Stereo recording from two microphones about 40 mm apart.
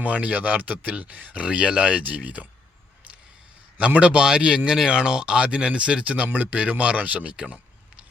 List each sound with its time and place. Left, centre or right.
0.0 s speech: right
3.8 s speech: right
6.2 s speech: right
6.6 s speech: right